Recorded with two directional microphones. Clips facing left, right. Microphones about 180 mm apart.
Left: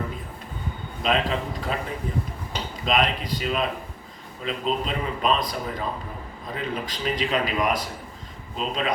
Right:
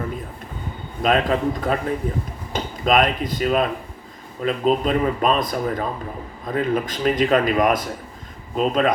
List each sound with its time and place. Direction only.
1.0 s speech: 50° right (ahead or behind)